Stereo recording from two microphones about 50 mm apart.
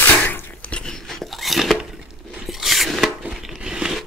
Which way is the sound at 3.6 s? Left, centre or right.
Centre.